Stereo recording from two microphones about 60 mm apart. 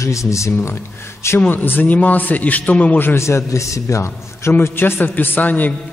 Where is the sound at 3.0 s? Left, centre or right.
Left.